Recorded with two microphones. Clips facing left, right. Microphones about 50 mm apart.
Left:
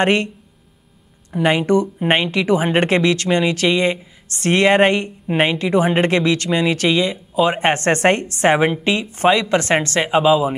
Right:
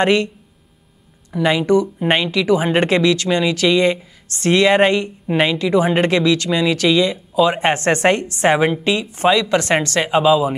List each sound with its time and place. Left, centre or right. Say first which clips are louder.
0.0 s speech: right 1 dB; left
1.3 s speech: right 1 dB; left
2.0 s speech: even; left
2.3 s speech: right 1 dB; left
10.0 s speech: right 1 dB; centre